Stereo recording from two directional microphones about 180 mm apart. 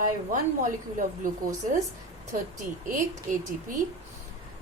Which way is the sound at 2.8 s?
45° right (ahead or behind).